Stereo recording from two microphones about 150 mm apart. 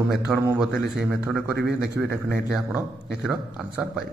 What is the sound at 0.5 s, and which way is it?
A man's voice, 5° right (ahead or behind).